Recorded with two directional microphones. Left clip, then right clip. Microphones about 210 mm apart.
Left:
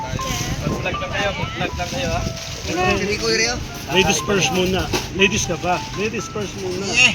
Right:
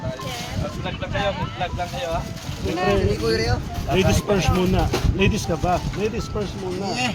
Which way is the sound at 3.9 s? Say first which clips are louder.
Left 3 dB; 50° right (ahead or behind).